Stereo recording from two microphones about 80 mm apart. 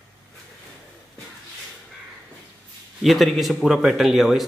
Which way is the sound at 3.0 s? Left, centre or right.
Centre.